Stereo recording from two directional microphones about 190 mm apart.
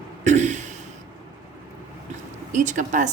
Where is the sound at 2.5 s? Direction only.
40° right (ahead or behind).